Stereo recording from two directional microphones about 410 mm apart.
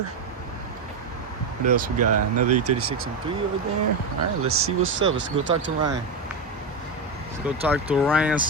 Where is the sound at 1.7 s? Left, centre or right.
Right.